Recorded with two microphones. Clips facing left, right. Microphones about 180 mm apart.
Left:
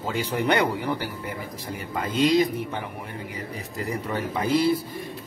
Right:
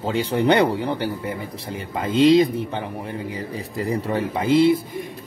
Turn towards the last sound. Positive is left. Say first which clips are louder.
# right 5 dB
turn(degrees=-25)  # may be behind; listen again after turning